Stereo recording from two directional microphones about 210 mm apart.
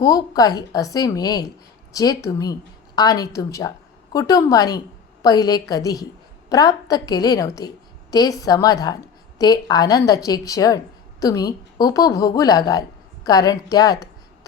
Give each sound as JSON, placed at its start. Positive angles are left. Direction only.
{"t": 0.0, "sound": "a woman's voice", "side_deg": 15}